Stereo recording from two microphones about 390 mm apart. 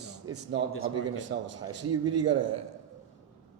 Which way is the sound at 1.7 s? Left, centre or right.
Right.